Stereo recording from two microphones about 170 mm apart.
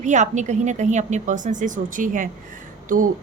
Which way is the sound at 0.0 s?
45° right (ahead or behind).